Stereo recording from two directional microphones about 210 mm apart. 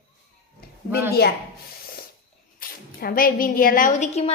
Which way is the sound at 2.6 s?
45° left (ahead or behind).